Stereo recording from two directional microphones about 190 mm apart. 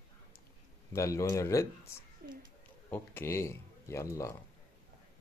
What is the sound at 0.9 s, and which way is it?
Speech, 15° left (ahead or behind).